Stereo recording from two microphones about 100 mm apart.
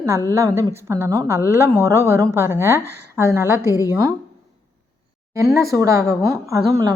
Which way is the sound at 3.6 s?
35° left (ahead or behind).